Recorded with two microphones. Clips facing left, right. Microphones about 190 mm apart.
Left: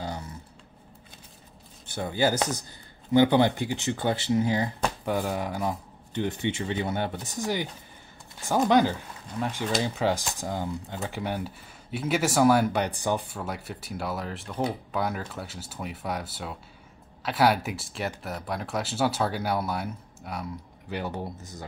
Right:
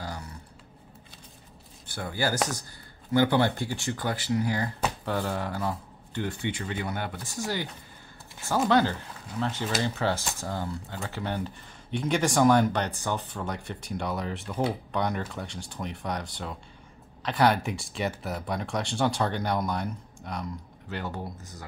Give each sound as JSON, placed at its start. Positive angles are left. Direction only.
{"t": 1.9, "sound": "speech", "side_deg": 20}